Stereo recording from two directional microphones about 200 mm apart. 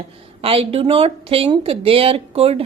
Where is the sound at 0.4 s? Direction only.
30° right (ahead or behind).